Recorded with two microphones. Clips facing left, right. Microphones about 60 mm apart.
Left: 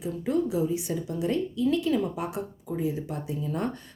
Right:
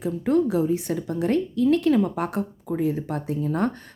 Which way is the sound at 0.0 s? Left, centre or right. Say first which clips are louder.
Right 6 dB; right.